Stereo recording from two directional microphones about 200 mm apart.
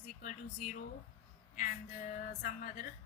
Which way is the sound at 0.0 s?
40° left (ahead or behind).